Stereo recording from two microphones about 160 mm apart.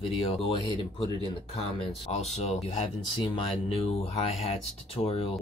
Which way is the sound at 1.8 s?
40° left (ahead or behind).